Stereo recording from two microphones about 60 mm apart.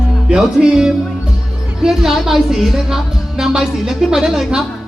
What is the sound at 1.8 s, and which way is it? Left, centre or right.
A woman's voice, centre.